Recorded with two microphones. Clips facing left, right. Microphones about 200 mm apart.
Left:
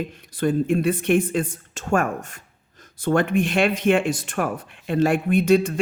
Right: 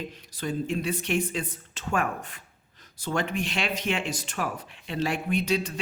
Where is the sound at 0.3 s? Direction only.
55° left (ahead or behind).